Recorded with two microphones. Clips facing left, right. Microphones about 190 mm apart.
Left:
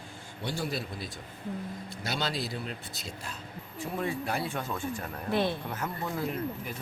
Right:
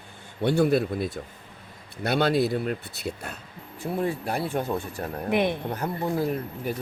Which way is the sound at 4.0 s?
35° right (ahead or behind).